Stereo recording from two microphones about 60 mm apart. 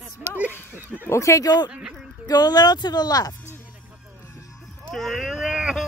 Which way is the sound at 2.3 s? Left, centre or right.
Left.